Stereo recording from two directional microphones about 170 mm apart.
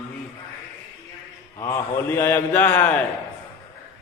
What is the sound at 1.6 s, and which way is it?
A man's voice, 15° left (ahead or behind).